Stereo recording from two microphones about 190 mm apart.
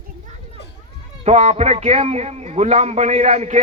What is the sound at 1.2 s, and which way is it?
A man's voice, 35° right (ahead or behind).